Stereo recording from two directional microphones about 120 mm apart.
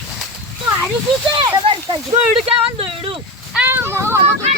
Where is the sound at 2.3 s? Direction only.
55° right (ahead or behind).